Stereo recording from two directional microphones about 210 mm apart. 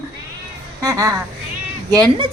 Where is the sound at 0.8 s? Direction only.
15° right (ahead or behind).